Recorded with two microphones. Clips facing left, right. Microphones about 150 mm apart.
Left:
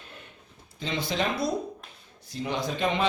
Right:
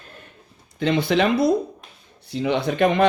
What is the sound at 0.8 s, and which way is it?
Speech, 60° right (ahead or behind).